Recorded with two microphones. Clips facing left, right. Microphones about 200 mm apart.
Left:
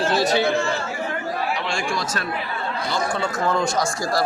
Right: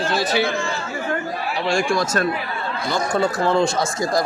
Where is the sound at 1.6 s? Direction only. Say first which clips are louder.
Right 6 dB; 45° right (ahead or behind).